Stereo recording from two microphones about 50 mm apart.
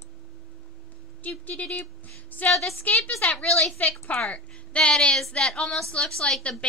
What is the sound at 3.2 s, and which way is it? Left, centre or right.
Speech, left.